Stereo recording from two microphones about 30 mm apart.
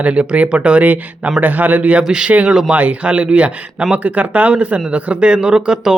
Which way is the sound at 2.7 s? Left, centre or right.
Right.